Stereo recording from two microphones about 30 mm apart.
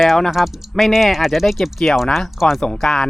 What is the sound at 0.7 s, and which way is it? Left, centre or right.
Speech, centre.